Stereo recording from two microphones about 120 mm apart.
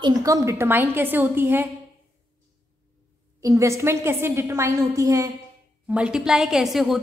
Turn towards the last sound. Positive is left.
turn(degrees=0)  # may be behind; listen again after turning